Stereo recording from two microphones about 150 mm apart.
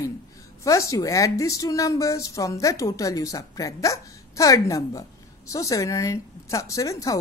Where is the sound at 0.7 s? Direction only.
20° left (ahead or behind).